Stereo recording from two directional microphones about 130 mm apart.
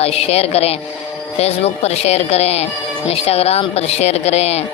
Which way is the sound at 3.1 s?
50° left (ahead or behind).